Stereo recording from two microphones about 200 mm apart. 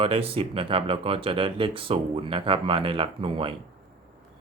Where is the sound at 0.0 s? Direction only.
25° right (ahead or behind).